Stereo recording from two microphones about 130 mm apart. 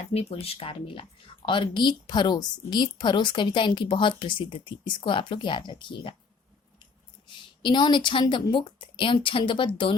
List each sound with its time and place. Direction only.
0.1 s speech: 50° left (ahead or behind)
7.3 s a woman's voice: 35° left (ahead or behind)